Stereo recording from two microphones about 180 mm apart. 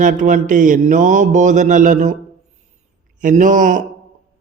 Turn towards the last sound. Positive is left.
turn(degrees=-45)  # may be behind; listen again after turning